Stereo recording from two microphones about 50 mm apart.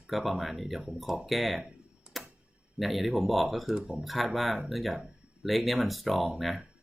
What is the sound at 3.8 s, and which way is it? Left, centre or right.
Speech, centre.